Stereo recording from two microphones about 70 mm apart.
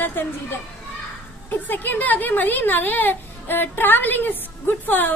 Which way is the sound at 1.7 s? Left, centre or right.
Left.